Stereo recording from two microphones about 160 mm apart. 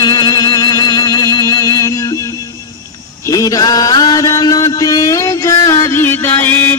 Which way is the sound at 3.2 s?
20° left (ahead or behind).